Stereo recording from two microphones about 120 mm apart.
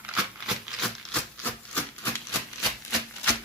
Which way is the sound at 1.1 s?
15° left (ahead or behind).